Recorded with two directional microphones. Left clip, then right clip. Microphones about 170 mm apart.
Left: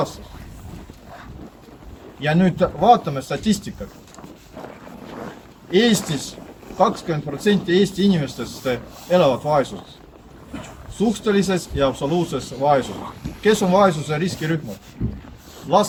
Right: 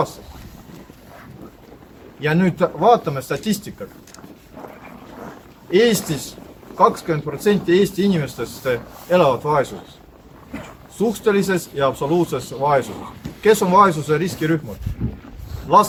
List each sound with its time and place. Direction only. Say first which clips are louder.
2.2 s speech: right 1 dB; 20° right (ahead or behind)
5.7 s speech: right 2 dB; 20° right (ahead or behind)
10.9 s speech: right 2 dB; 20° right (ahead or behind)
15.7 s speech: right 4 dB; 15° right (ahead or behind)